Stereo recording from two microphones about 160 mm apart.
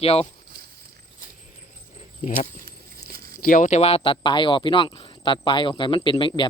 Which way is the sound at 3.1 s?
70° right (ahead or behind).